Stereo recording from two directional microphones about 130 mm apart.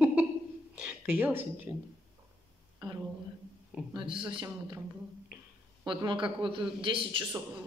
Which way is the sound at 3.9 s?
40° right (ahead or behind).